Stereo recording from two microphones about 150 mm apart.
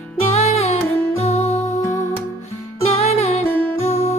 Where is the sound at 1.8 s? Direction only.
20° left (ahead or behind).